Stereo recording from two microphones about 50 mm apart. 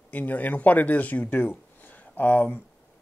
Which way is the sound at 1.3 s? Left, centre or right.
Left.